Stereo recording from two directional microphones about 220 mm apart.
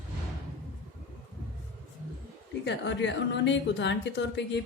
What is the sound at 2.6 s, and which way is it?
A woman's voice, 55° left (ahead or behind).